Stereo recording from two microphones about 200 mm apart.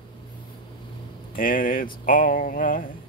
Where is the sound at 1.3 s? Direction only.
45° left (ahead or behind).